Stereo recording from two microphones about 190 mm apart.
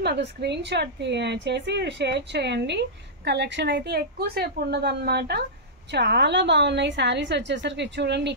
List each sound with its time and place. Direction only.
0.0 s a woman's voice: 60° right (ahead or behind)